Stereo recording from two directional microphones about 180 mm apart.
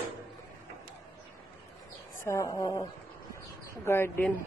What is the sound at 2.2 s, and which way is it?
Speech, 15° left (ahead or behind).